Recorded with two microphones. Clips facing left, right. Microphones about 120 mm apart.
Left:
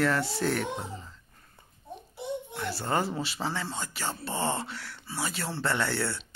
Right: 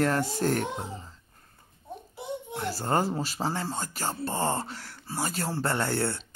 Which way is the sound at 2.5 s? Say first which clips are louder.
Right 3 dB; 40° right (ahead or behind).